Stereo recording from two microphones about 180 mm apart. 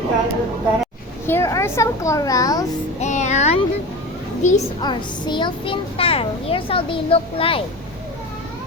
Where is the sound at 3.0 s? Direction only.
40° left (ahead or behind).